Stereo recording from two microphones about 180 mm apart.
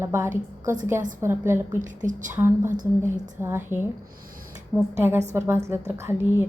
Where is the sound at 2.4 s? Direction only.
15° right (ahead or behind).